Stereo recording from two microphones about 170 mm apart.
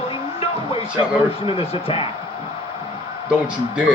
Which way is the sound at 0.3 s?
35° left (ahead or behind).